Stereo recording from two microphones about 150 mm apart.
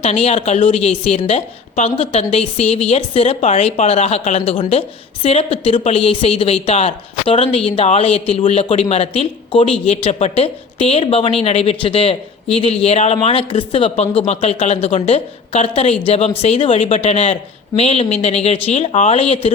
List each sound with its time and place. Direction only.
0.0 s a woman's voice: 45° left (ahead or behind)